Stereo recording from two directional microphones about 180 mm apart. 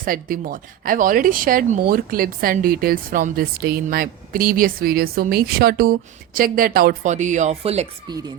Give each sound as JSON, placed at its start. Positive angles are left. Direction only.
{"t": 0.0, "sound": "speech", "side_deg": -50}